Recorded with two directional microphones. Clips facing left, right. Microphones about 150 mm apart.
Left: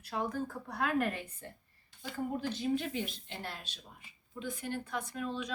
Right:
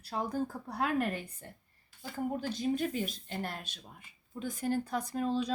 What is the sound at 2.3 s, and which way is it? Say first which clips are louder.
Speech: even; 40° right (ahead or behind).